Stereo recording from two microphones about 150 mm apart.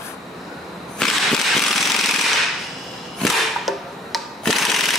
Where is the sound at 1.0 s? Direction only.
Centre (ahead or behind).